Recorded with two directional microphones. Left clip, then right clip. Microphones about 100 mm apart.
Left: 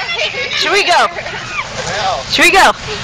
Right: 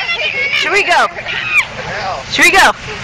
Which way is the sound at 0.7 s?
20° left (ahead or behind).